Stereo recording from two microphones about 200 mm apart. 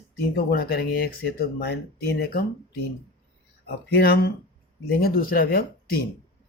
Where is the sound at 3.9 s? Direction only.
50° left (ahead or behind).